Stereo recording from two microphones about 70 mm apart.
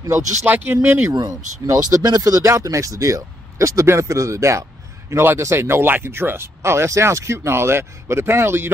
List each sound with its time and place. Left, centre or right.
0.5 s speech: right
1.2 s speech: right
2.4 s speech: right